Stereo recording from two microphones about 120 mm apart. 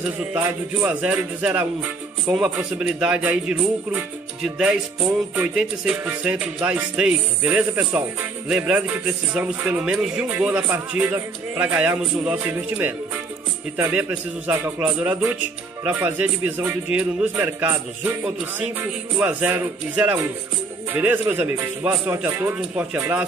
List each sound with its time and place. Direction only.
0.2 s speech: 10° right (ahead or behind)